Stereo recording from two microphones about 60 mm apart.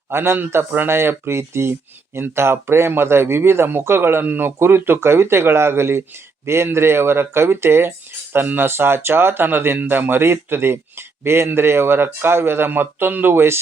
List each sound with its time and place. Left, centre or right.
0.1 s a man's voice: right